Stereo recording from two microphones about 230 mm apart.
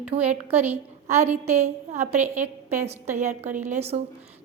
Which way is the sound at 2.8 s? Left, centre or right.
Right.